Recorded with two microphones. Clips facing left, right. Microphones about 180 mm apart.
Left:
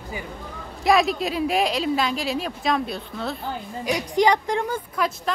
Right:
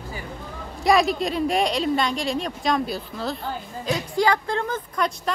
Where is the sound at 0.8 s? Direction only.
Centre (ahead or behind).